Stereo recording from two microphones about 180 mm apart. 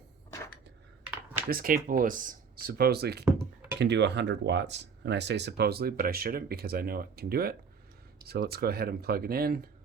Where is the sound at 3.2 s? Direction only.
5° right (ahead or behind).